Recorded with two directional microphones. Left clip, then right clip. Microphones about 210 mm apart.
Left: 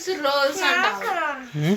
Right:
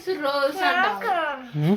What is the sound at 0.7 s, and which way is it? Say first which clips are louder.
Speech: even; 55° right (ahead or behind).